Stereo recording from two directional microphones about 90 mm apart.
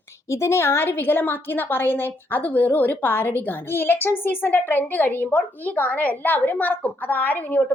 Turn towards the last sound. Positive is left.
turn(degrees=20)  # may be behind; listen again after turning